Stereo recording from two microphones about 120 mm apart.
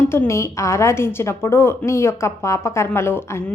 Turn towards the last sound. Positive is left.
turn(degrees=20)  # may be behind; listen again after turning